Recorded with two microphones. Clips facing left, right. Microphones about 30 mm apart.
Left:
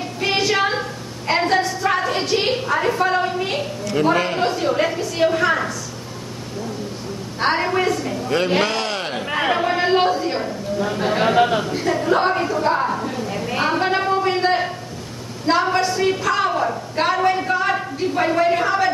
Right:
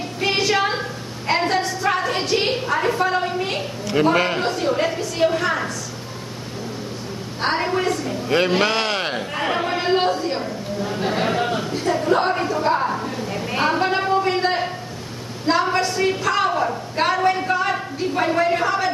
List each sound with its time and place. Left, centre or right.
0.2 s a sound: centre
4.0 s a man's voice: centre
4.4 s a woman's voice: centre
7.3 s a woman's voice: centre
8.3 s a man's voice: centre
8.6 s a sound: right
9.5 s a man's voice: centre
15.4 s a sound: centre
16.9 s a woman's voice: centre